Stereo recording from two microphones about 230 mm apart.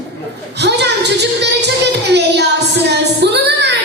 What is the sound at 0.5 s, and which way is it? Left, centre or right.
Music, right.